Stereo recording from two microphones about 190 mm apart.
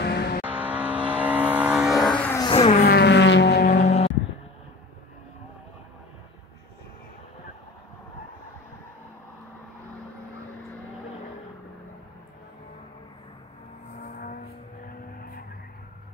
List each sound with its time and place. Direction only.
0.0 s vehicle: 60° left (ahead or behind)
0.4 s vehicle: 10° right (ahead or behind); by 2.4 s 10° left (ahead or behind)
2.4 s vehicle: 30° left (ahead or behind)
2.8 s vehicle: 60° left (ahead or behind)
14.0 s vehicle: 45° left (ahead or behind)